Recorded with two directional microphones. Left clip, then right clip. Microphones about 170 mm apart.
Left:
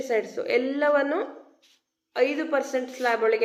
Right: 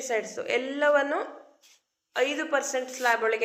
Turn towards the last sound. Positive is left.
turn(degrees=15)  # may be behind; listen again after turning